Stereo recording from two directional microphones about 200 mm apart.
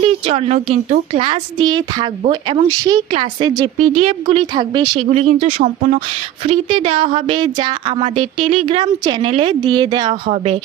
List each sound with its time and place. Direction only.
0.0 s a woman's voice: 30° right (ahead or behind)
5.1 s speech: 35° right (ahead or behind)
6.4 s a woman's voice: 25° right (ahead or behind)
10.2 s speech: 30° right (ahead or behind)